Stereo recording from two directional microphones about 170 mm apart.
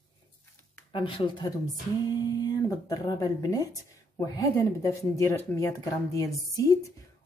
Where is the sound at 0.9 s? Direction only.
30° left (ahead or behind).